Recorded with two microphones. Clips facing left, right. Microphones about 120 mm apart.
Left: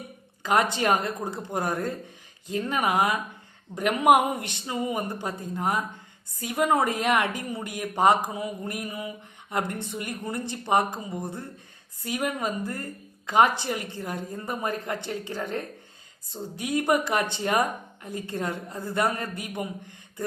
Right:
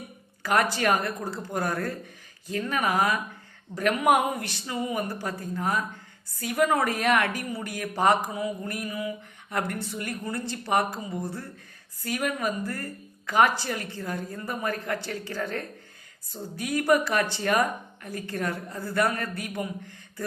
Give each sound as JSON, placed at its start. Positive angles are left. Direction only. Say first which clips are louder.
{"t": 0.4, "sound": "speech", "louder": "left 1 dB", "side_deg": 20}